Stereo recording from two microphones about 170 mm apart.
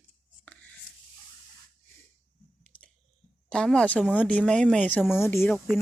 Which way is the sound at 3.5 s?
5° left (ahead or behind).